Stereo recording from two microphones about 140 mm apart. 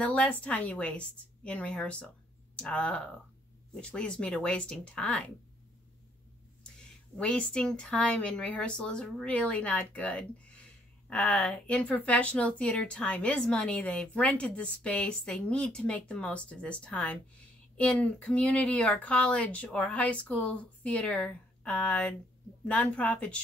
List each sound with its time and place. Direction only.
0.0 s a woman's voice: 10° left (ahead or behind)
7.2 s a woman's voice: 5° left (ahead or behind)